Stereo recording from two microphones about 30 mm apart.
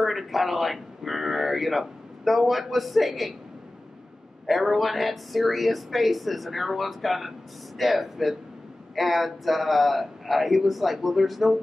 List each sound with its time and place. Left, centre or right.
0.0 s speech: centre
4.5 s a woman's voice: centre